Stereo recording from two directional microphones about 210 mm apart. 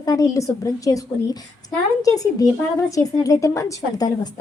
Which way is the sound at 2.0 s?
15° left (ahead or behind).